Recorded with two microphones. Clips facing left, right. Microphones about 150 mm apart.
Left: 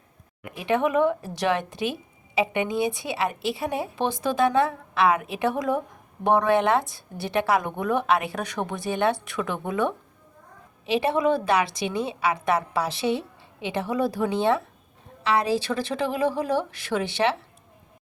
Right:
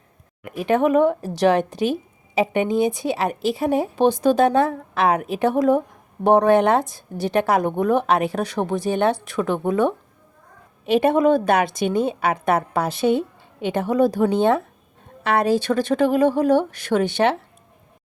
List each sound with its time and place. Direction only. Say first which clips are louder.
0.5 s a woman's voice: right 5 dB; 45° right (ahead or behind)